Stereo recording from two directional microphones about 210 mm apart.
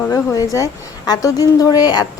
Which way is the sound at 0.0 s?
15° left (ahead or behind).